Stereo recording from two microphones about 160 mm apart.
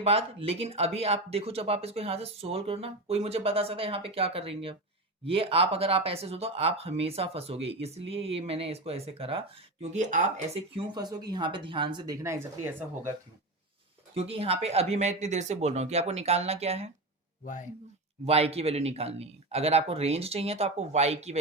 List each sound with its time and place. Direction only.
0.0 s speech: 40° right (ahead or behind)
10.9 s speech: 25° right (ahead or behind)
14.2 s speech: 40° right (ahead or behind)
18.3 s speech: 40° right (ahead or behind)